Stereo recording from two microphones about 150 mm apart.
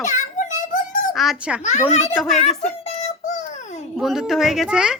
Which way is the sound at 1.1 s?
Centre (ahead or behind).